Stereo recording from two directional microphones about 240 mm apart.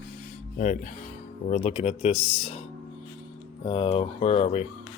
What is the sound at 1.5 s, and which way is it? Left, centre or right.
Speech, left.